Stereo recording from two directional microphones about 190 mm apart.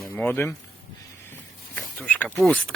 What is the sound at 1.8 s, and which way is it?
Speech, 5° left (ahead or behind).